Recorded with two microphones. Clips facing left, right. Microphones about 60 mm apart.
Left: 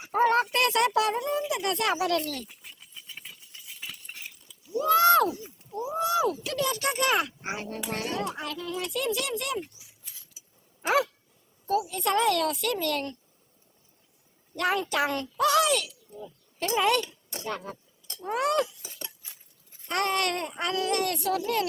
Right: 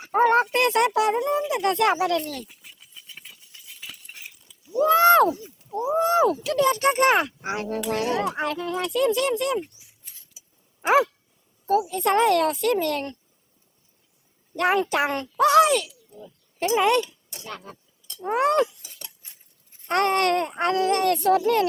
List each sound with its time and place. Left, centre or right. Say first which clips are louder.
0.1 s a sound: right 4 dB; right
1.5 s speech: right 6 dB; right
2.4 s a sound: right 2 dB; centre
4.8 s speech: right 5 dB; right
7.4 s speech: right 6 dB; right
8.3 s speech: right 7 dB; right
10.8 s speech: right 6 dB; right
14.5 s speech: right 5 dB; right
17.4 s speech: left 3 dB; centre
18.2 s speech: right 5 dB; right
18.8 s a sound: left 3 dB; left
19.9 s speech: right 6 dB; right